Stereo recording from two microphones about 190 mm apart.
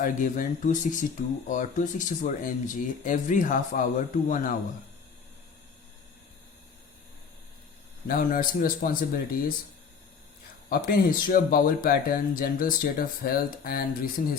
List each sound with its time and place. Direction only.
0.0 s speech: 45° left (ahead or behind)
8.0 s speech: 50° left (ahead or behind)
10.7 s speech: 50° left (ahead or behind)